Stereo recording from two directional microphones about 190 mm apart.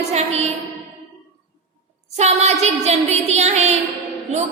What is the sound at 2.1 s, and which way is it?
A woman's voice, 35° right (ahead or behind).